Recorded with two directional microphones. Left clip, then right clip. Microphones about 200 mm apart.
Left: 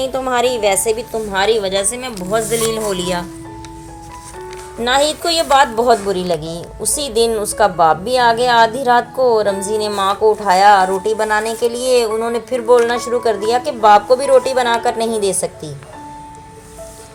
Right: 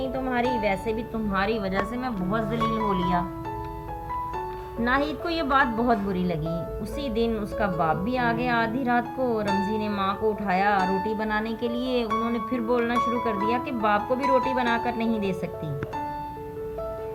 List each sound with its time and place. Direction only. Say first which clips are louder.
0.0 s a woman's voice: left 10 dB; 20° left (ahead or behind)
4.8 s a woman's voice: left 10 dB; 15° left (ahead or behind)